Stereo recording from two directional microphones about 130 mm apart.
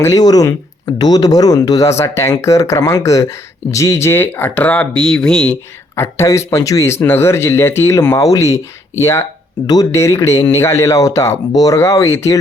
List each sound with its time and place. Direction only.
0.0 s speech: 25° left (ahead or behind); by 5.5 s 5° left (ahead or behind)
6.0 s speech: 20° left (ahead or behind)